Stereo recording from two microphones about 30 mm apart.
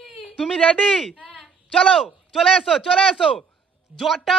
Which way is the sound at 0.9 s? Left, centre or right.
Centre.